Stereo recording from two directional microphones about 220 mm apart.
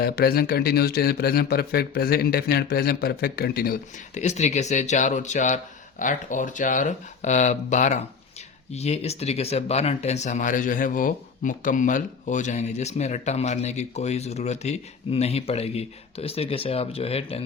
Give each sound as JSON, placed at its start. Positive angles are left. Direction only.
{"t": 0.0, "sound": "speech", "side_deg": 45}